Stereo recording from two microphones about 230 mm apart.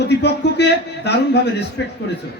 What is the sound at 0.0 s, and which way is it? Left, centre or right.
A man's voice, left.